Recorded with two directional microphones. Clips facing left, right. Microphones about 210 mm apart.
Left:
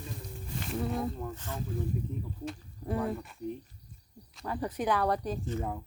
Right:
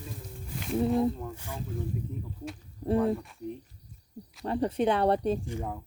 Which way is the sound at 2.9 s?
Centre (ahead or behind).